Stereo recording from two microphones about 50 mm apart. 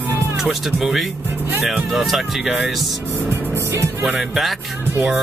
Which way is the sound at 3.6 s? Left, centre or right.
Right.